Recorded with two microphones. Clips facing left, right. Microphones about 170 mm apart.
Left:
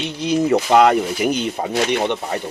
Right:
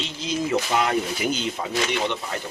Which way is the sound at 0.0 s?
65° left (ahead or behind).